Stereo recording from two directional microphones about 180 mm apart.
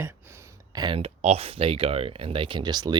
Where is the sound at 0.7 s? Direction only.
25° right (ahead or behind).